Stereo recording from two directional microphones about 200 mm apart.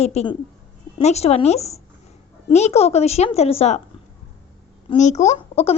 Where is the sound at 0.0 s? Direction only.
30° left (ahead or behind).